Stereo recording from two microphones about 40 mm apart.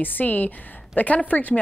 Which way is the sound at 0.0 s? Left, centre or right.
Left.